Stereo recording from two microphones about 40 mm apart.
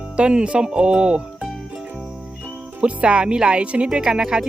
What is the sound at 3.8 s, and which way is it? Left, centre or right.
Speech, centre.